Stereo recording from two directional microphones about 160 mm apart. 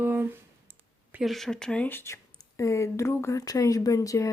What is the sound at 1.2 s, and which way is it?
Speech, centre (ahead or behind).